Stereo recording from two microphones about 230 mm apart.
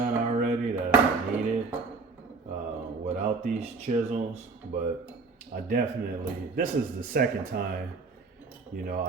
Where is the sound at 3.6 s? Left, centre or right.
Right.